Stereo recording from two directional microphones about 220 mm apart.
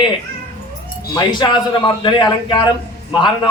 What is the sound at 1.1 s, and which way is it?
A man's voice, 20° left (ahead or behind).